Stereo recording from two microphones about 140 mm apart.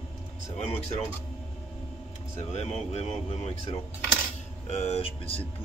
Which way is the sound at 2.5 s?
50° left (ahead or behind).